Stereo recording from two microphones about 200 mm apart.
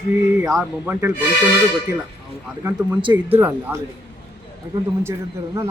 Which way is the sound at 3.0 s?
25° right (ahead or behind).